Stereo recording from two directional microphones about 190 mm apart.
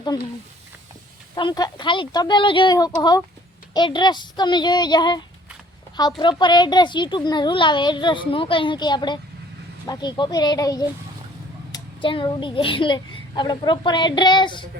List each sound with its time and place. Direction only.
1.4 s a child's voice: 25° left (ahead or behind)